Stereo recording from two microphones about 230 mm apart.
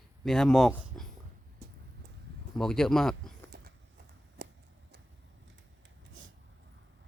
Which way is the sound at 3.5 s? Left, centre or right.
Right.